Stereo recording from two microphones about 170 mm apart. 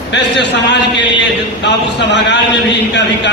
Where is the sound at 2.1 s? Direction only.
90° left.